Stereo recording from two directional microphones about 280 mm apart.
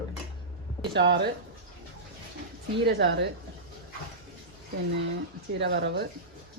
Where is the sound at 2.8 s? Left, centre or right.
Right.